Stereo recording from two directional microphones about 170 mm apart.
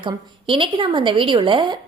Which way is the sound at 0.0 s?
30° right (ahead or behind).